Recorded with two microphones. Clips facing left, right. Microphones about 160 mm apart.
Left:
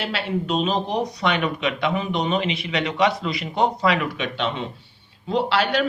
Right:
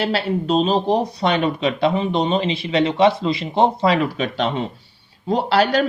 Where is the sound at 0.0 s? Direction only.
35° right (ahead or behind).